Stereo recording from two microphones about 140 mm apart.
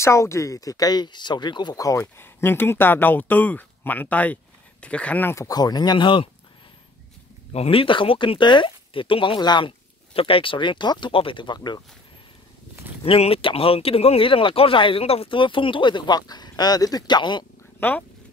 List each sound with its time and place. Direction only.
0.0 s speech: 20° left (ahead or behind)
7.5 s speech: 45° left (ahead or behind)
13.0 s speech: 45° left (ahead or behind)
17.7 s speech: 15° left (ahead or behind)